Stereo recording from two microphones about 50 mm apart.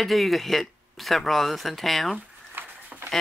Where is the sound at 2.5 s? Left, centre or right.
Right.